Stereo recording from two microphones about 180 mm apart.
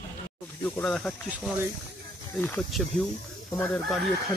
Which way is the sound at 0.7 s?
5° left (ahead or behind).